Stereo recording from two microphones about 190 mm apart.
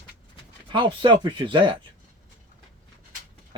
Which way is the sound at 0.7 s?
25° right (ahead or behind).